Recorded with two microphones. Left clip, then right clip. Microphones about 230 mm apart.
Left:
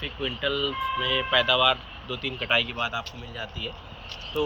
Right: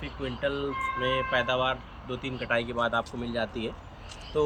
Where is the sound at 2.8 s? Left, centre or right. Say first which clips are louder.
Right 2 dB; right.